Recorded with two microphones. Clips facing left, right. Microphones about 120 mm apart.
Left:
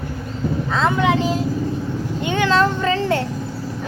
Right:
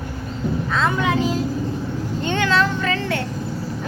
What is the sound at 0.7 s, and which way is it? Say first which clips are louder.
A child's voice: left 3 dB; 25° left (ahead or behind).